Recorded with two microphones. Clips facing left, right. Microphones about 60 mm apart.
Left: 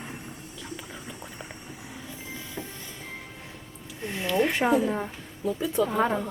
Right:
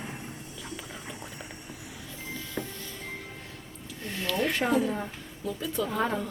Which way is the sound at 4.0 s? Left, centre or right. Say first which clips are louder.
Left 4 dB; centre.